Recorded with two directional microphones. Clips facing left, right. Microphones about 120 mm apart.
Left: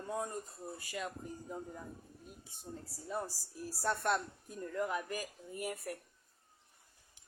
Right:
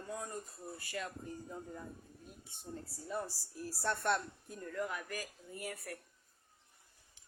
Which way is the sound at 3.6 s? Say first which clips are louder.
Left 1 dB; 10° left (ahead or behind).